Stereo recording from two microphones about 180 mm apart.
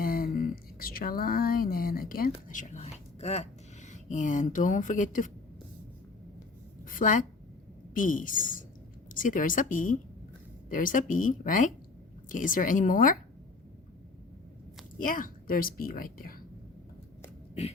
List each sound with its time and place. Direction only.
0.0 s speech: 55° left (ahead or behind)
6.8 s a sound: 50° left (ahead or behind)
7.9 s speech: 50° left (ahead or behind)
14.9 s speech: 50° left (ahead or behind)